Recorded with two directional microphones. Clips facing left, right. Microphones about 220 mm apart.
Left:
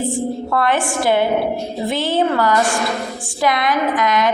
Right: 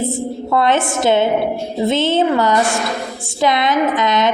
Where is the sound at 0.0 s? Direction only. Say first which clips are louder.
Even; 20° right (ahead or behind).